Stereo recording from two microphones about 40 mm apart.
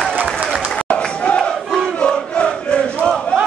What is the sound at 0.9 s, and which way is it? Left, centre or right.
Crowd, left.